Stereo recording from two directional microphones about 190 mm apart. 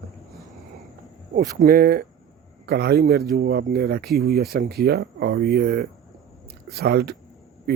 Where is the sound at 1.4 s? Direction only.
50° right (ahead or behind).